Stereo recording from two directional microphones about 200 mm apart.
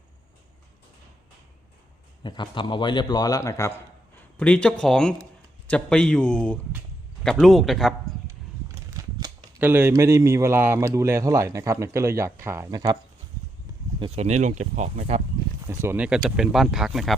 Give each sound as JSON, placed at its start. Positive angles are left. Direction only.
{"t": 2.2, "sound": "a man's voice", "side_deg": 25}
{"t": 8.9, "sound": "speech", "side_deg": -15}
{"t": 14.0, "sound": "speech", "side_deg": -35}
{"t": 15.6, "sound": "speech", "side_deg": -10}